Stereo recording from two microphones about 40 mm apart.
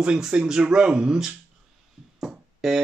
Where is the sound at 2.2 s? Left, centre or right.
Centre.